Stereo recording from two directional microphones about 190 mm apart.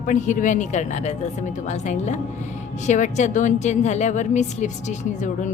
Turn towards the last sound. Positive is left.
turn(degrees=40)  # may be behind; listen again after turning